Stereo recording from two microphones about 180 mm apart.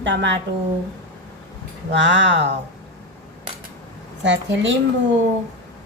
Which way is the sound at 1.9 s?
85° right.